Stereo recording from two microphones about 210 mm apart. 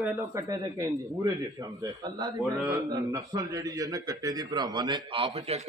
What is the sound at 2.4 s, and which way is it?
Speech, centre (ahead or behind).